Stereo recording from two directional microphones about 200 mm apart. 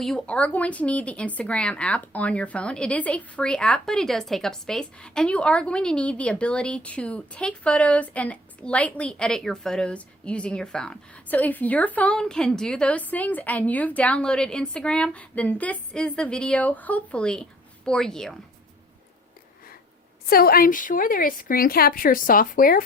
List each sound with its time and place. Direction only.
0.0 s speech: 5° left (ahead or behind)
20.3 s a woman's voice: 50° left (ahead or behind)